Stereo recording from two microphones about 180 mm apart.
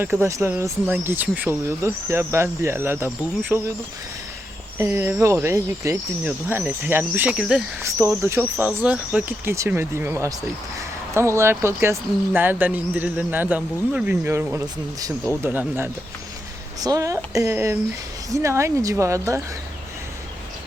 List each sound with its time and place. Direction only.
0.0 s speech: 15° right (ahead or behind)
4.8 s speech: 15° right (ahead or behind)